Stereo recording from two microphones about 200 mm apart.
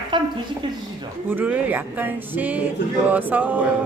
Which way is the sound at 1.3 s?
10° right (ahead or behind).